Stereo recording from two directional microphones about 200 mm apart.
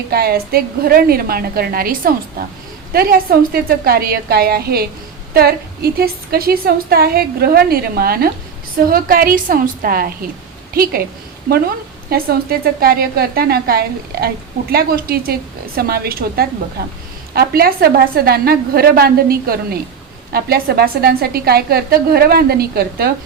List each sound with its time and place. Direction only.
0.1 s a woman's voice: 50° right (ahead or behind)
12.1 s a woman's voice: 50° right (ahead or behind)